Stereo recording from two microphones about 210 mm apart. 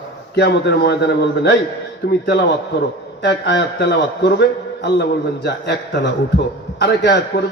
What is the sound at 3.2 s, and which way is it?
A man's voice, 55° left (ahead or behind).